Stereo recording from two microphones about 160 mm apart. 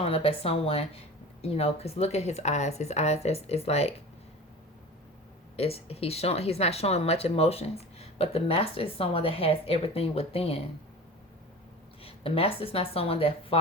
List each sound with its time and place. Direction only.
0.0 s speech: 35° left (ahead or behind)
5.5 s speech: 40° left (ahead or behind)
12.0 s speech: 35° left (ahead or behind)